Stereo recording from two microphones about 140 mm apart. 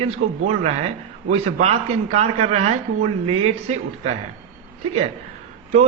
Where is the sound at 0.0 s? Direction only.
55° right (ahead or behind).